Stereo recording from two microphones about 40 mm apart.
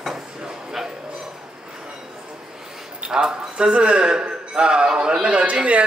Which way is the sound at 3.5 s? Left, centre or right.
Right.